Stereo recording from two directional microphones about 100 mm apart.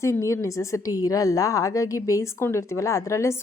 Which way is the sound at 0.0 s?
30° left (ahead or behind).